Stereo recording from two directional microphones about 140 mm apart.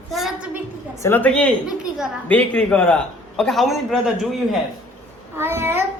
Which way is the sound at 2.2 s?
10° left (ahead or behind).